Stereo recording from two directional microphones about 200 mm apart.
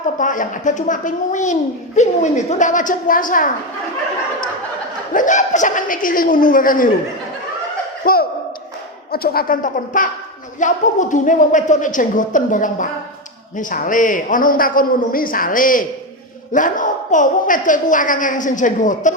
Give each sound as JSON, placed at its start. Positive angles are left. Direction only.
{"t": 0.2, "sound": "a woman's voice", "side_deg": 40}
{"t": 5.1, "sound": "a man's voice", "side_deg": 40}
{"t": 8.0, "sound": "a sound", "side_deg": 50}
{"t": 9.1, "sound": "a man's voice", "side_deg": 50}